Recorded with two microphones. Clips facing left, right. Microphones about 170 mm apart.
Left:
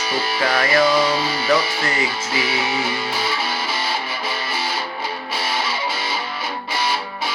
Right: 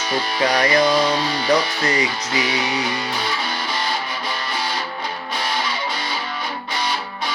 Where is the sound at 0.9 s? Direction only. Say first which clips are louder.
Even; 5° left (ahead or behind).